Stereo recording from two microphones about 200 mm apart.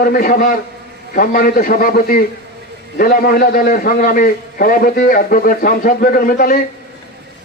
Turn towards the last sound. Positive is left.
turn(degrees=45)  # may be behind; listen again after turning